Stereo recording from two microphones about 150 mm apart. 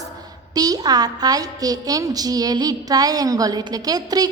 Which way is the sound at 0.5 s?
25° right (ahead or behind).